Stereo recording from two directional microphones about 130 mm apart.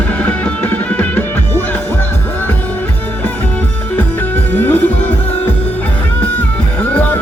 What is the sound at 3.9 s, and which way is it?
Music, 15° left (ahead or behind).